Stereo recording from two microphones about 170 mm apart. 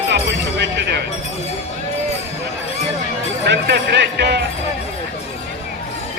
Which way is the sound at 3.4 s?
80° right.